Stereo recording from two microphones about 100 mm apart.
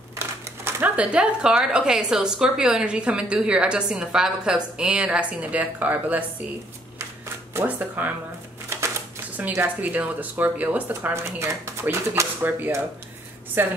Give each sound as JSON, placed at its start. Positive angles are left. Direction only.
{"t": 0.7, "sound": "a woman's voice", "side_deg": -20}
{"t": 7.5, "sound": "speech", "side_deg": -20}
{"t": 9.5, "sound": "speech", "side_deg": -20}